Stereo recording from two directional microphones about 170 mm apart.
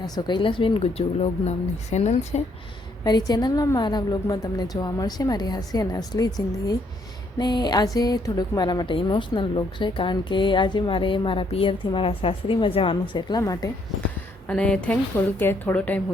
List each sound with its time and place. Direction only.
0.0 s speech: 25° left (ahead or behind); by 2.4 s 40° left (ahead or behind)
3.0 s a woman's voice: 25° left (ahead or behind)
14.4 s a woman's voice: 5° left (ahead or behind)